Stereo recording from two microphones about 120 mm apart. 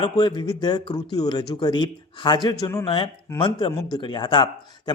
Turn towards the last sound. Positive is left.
turn(degrees=40)  # may be behind; listen again after turning